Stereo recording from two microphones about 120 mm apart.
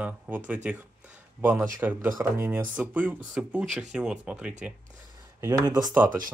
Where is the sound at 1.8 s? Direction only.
15° right (ahead or behind).